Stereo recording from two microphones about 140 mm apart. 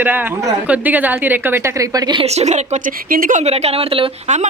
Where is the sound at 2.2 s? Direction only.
50° right (ahead or behind); by 3.4 s 80° right.